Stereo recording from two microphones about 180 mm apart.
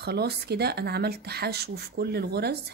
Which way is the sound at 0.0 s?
65° right (ahead or behind).